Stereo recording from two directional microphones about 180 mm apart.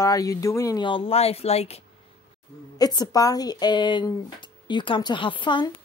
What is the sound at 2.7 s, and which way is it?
Speech, 20° left (ahead or behind).